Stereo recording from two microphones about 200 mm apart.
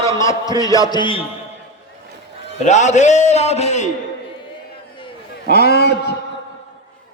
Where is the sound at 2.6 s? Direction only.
35° left (ahead or behind).